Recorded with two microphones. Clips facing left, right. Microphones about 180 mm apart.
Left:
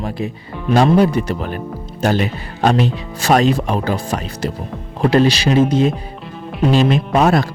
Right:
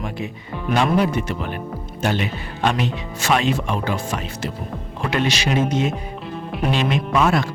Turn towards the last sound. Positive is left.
turn(degrees=35)  # may be behind; listen again after turning